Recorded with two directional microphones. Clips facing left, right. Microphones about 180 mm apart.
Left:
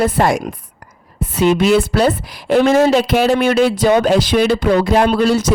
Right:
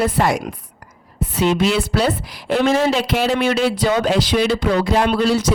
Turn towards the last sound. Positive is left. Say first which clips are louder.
# left 3 dB
turn(degrees=50)  # may be behind; listen again after turning